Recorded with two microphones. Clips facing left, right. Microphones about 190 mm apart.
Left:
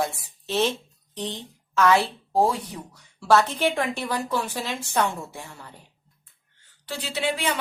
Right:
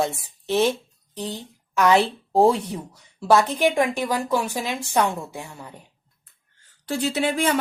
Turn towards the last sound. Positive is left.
turn(degrees=-45)  # may be behind; listen again after turning